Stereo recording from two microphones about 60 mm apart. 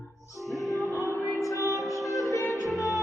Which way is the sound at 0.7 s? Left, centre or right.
Right.